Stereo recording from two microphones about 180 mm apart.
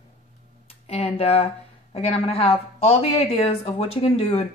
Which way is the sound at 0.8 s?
35° left (ahead or behind).